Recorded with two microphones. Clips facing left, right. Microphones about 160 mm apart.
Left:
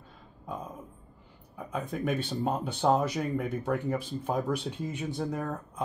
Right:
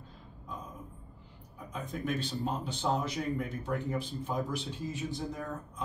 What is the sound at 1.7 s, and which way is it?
Speech, 55° left (ahead or behind).